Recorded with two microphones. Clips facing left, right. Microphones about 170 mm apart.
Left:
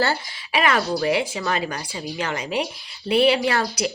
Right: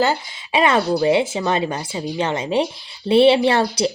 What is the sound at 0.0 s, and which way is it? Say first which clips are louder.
A woman's voice: right 4 dB; 20° right (ahead or behind).